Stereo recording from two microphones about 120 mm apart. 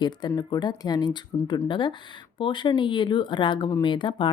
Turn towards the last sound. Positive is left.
turn(degrees=40)  # may be behind; listen again after turning